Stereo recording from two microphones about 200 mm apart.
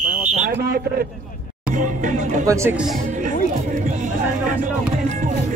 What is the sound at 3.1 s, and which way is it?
Music, 40° right (ahead or behind).